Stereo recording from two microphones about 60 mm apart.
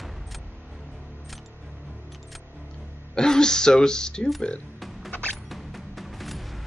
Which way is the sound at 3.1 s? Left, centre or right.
Centre.